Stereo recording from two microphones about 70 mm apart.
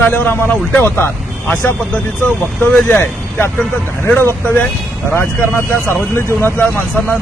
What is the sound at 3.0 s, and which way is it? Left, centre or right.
Speech, left.